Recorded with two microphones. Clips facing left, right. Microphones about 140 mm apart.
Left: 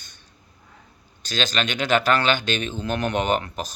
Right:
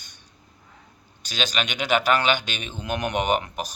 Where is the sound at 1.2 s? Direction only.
10° right (ahead or behind).